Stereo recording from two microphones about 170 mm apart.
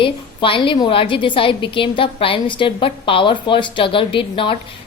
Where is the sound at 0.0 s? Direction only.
30° left (ahead or behind).